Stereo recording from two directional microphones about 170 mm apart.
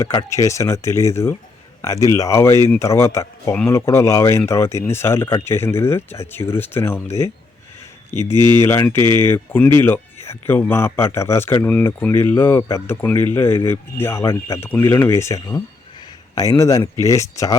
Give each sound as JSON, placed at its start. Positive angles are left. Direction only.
{"t": 0.0, "sound": "speech", "side_deg": 20}
{"t": 8.1, "sound": "speech", "side_deg": -25}
{"t": 8.4, "sound": "a man's voice", "side_deg": 15}